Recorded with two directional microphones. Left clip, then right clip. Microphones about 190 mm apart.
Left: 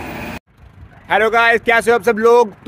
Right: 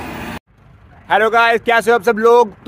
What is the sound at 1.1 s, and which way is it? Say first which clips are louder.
Speech: even; centre (ahead or behind).